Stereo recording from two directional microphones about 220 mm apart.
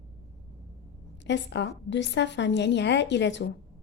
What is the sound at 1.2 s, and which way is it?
A woman's voice, 55° left (ahead or behind).